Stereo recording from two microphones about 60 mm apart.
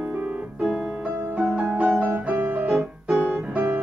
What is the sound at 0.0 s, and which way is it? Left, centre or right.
Piano, right.